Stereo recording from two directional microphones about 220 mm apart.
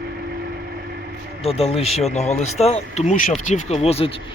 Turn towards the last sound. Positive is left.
turn(degrees=25)  # may be behind; listen again after turning